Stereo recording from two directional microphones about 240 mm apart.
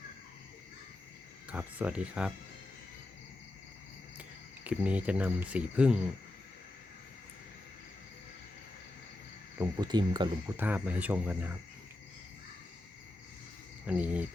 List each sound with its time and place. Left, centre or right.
1.5 s speech: centre
4.2 s speech: centre
9.6 s speech: centre
10.6 s speech: centre
13.8 s speech: centre